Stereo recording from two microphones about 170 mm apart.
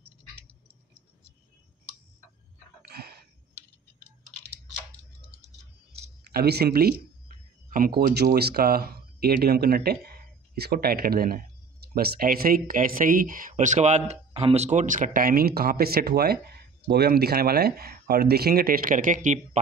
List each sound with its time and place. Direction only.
2.9 s a sound: 70° right (ahead or behind)
6.3 s speech: 70° right (ahead or behind)
8.0 s speech: 70° right (ahead or behind); by 19.6 s 45° right (ahead or behind)